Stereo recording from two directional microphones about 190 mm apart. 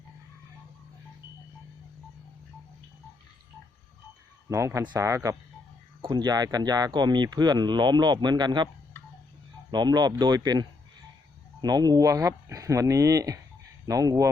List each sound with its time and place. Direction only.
4.4 s speech: 15° right (ahead or behind)
9.7 s speech: 20° right (ahead or behind)